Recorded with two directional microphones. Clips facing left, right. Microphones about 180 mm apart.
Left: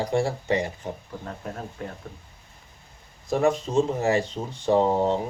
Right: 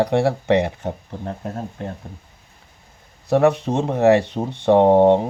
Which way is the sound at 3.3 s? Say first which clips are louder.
Right 6 dB; 65° right (ahead or behind).